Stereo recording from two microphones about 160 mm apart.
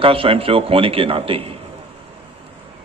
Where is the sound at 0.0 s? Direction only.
35° right (ahead or behind).